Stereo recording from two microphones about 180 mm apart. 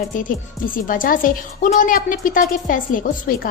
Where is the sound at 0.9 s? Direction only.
50° left (ahead or behind).